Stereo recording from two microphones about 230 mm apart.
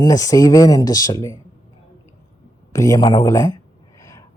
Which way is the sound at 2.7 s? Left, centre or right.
Centre.